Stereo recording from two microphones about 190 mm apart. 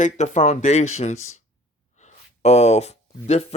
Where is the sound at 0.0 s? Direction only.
40° left (ahead or behind).